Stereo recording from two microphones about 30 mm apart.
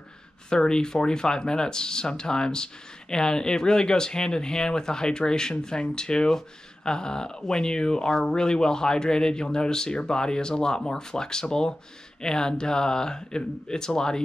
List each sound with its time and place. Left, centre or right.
0.5 s speech: left